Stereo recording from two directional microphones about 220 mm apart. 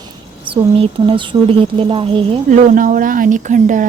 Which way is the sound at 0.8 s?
25° right (ahead or behind).